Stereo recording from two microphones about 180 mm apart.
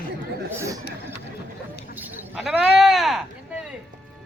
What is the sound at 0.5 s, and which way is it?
Speech, 15° right (ahead or behind).